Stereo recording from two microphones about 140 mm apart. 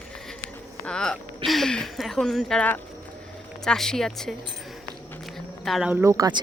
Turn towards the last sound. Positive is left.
turn(degrees=-25)  # may be behind; listen again after turning